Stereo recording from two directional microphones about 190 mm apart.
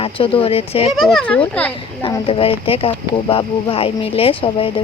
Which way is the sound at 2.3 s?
30° left (ahead or behind).